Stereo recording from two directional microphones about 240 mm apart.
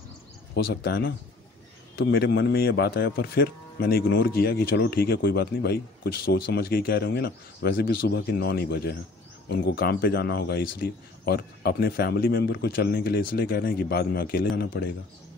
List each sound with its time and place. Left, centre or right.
0.8 s speech: left